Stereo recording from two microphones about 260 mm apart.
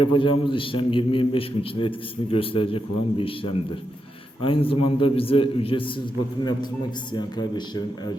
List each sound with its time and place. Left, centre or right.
0.0 s a man's voice: centre
7.1 s speech: centre